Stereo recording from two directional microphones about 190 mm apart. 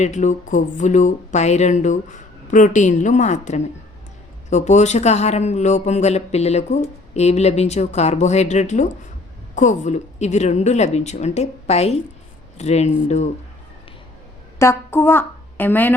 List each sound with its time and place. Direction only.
0.0 s speech: 40° left (ahead or behind)
14.6 s a woman's voice: 15° left (ahead or behind)